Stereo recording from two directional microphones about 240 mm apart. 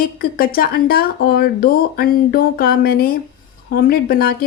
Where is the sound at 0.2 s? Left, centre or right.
Left.